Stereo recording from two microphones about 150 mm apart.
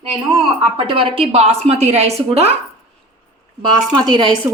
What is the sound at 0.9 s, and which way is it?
A woman's voice, 35° right (ahead or behind).